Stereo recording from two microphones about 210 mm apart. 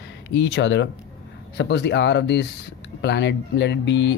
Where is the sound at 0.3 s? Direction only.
55° left (ahead or behind).